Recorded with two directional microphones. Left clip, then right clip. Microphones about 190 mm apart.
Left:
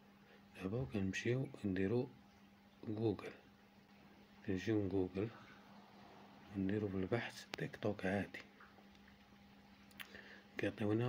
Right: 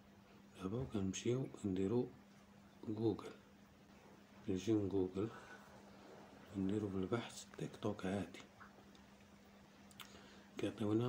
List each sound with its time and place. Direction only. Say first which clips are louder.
0.6 s speech: left 1 dB; 20° left (ahead or behind)
4.5 s speech: right 1 dB; 20° left (ahead or behind)
6.7 s speech: left 1 dB; 20° left (ahead or behind)
10.5 s speech: left 1 dB; 20° left (ahead or behind)